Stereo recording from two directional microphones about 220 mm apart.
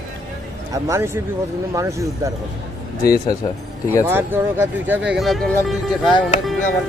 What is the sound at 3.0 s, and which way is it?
Speech, 15° left (ahead or behind).